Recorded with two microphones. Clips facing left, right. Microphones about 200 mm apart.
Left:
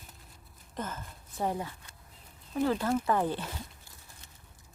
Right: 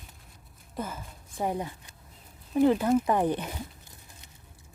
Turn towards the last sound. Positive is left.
turn(degrees=-20)  # may be behind; listen again after turning